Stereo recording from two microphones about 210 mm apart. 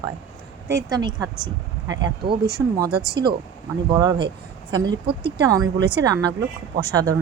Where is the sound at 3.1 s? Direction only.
20° right (ahead or behind).